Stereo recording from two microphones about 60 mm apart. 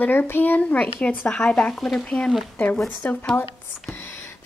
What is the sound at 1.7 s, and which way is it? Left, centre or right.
Speech, centre.